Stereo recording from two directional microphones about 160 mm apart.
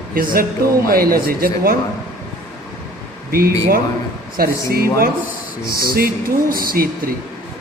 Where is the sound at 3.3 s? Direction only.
65° right (ahead or behind).